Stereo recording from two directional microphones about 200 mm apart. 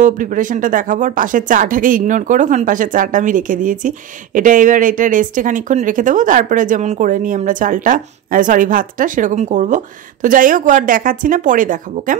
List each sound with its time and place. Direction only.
0.0 s speech: 40° right (ahead or behind)